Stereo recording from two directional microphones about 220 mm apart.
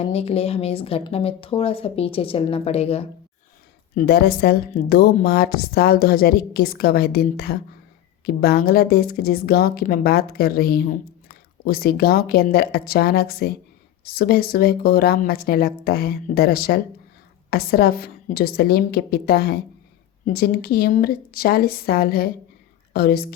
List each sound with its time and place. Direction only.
0.0 s speech: 30° left (ahead or behind)
3.9 s a woman's voice: 45° left (ahead or behind)